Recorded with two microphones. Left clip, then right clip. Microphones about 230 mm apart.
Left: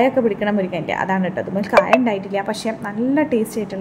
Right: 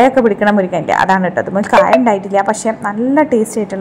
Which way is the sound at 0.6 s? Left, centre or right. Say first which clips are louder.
Right 8 dB; right.